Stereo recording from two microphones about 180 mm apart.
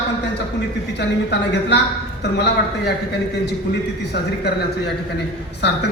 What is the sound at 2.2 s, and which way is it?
A man's voice, 70° left (ahead or behind).